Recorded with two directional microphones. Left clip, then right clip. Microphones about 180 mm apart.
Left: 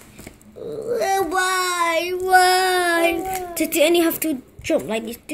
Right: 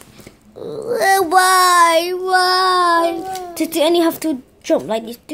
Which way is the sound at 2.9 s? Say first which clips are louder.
Right 3 dB; 15° right (ahead or behind).